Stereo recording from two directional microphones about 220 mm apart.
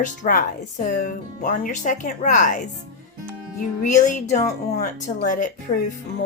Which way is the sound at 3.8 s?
35° left (ahead or behind).